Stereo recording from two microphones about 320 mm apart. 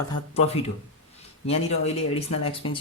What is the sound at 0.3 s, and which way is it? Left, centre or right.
Speech, centre.